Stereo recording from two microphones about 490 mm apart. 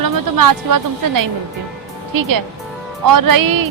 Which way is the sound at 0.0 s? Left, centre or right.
Right.